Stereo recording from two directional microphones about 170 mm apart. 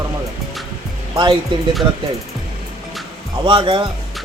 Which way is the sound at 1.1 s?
30° right (ahead or behind).